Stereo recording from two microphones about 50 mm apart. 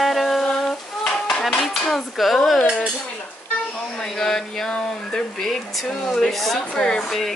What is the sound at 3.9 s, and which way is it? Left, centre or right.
Speech, centre.